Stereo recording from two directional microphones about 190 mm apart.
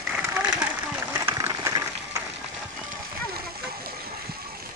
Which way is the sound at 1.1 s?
15° right (ahead or behind).